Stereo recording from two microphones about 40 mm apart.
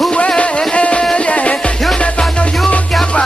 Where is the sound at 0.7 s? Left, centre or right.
Left.